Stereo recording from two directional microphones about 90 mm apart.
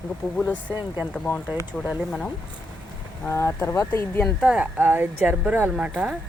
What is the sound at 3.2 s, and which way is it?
Speech, 30° left (ahead or behind).